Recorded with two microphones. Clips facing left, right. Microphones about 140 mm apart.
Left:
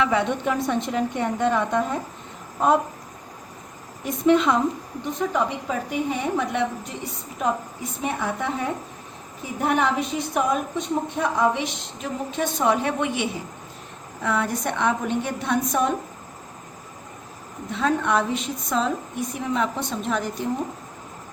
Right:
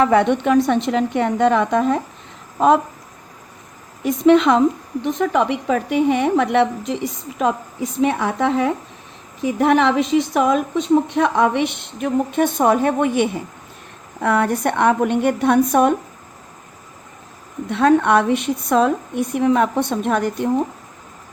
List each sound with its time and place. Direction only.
0.0 s a woman's voice: 55° right (ahead or behind); by 2.0 s 90° right
4.0 s a woman's voice: 85° right; by 15.9 s 60° right (ahead or behind)
17.7 s a woman's voice: 65° right (ahead or behind)